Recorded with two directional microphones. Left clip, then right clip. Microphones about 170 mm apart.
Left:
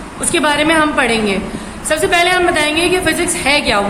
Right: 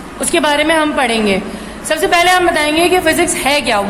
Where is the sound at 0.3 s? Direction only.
35° right (ahead or behind).